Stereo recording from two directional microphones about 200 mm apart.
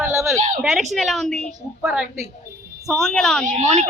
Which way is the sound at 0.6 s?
5° right (ahead or behind).